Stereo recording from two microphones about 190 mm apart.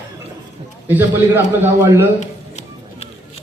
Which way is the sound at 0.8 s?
10° right (ahead or behind).